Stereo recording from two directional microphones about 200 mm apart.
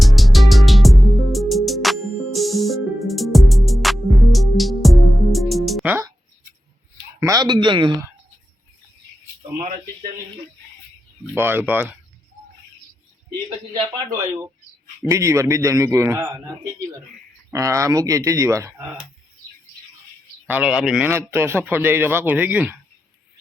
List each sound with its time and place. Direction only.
0.0 s music: centre (ahead or behind)
7.2 s speech: 15° right (ahead or behind)
9.6 s speech: 35° right (ahead or behind)
11.3 s a man's voice: 10° right (ahead or behind)
13.5 s a man's voice: 20° right (ahead or behind)
17.5 s a man's voice: 15° right (ahead or behind)
20.5 s a man's voice: 5° right (ahead or behind)